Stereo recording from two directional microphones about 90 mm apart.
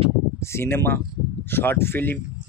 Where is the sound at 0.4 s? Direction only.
30° left (ahead or behind).